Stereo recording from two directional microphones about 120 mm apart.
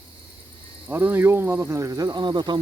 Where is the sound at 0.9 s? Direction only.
15° right (ahead or behind); by 2.6 s 40° right (ahead or behind).